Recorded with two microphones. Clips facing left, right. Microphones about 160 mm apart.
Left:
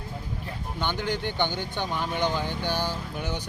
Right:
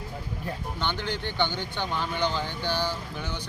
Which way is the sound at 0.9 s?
45° left (ahead or behind).